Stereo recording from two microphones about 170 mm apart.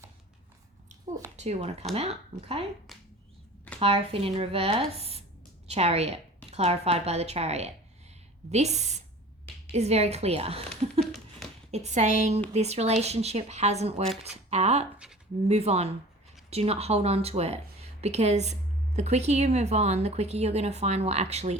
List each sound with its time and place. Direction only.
1.4 s a woman's voice: 40° right (ahead or behind)
2.9 s finger snapping: centre (ahead or behind)
3.8 s a woman's voice: 35° right (ahead or behind)
11.0 s a sound: centre (ahead or behind)
11.7 s a woman's voice: 40° right (ahead or behind)
14.9 s a sound: 5° right (ahead or behind)
15.4 s a woman's voice: 40° right (ahead or behind)